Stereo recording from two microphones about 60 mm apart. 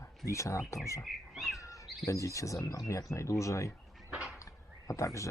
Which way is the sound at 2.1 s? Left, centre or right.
Left.